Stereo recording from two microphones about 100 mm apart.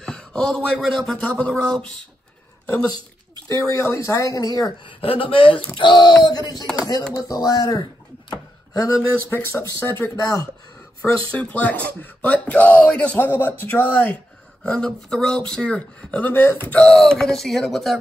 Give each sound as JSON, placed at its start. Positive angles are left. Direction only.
{"t": 0.0, "sound": "speech", "side_deg": 5}
{"t": 3.5, "sound": "speech", "side_deg": 30}
{"t": 4.8, "sound": "a woman's voice", "side_deg": 65}
{"t": 8.3, "sound": "chopping", "side_deg": 40}
{"t": 9.3, "sound": "speech", "side_deg": 25}